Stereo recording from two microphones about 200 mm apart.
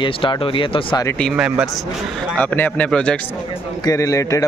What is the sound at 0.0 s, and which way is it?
Speech, 25° left (ahead or behind).